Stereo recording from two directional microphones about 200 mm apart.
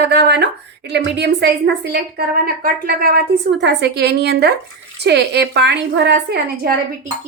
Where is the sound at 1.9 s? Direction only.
45° right (ahead or behind).